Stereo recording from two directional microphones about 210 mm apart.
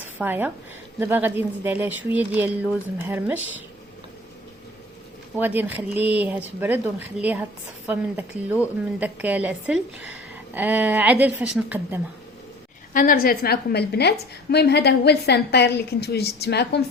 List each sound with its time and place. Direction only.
0.0 s a woman's voice: 10° right (ahead or behind)
5.4 s a woman's voice: 10° right (ahead or behind)
12.9 s a woman's voice: 40° left (ahead or behind)